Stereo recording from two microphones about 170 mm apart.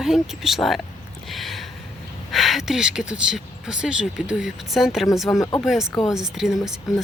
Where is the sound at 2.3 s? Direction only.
Centre (ahead or behind).